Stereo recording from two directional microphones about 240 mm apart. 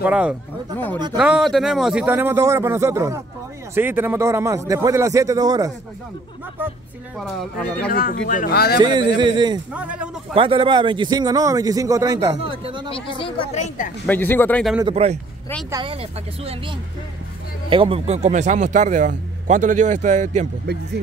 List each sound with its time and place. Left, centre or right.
0.0 s a man's voice: centre
7.9 s speech: left
8.8 s a man's voice: centre
9.8 s speech: centre
10.3 s a man's voice: right
12.9 s speech: left
14.0 s speech: centre
14.8 s a man's voice: right